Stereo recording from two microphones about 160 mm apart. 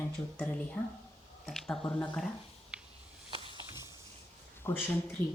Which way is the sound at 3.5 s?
25° left (ahead or behind).